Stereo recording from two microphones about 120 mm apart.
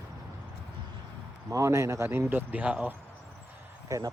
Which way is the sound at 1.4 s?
25° right (ahead or behind).